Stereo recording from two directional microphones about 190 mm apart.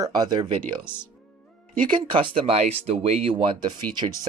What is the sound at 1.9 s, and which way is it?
Speech, 25° right (ahead or behind).